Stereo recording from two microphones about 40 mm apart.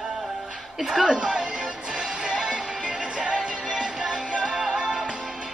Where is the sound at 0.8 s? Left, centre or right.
Centre.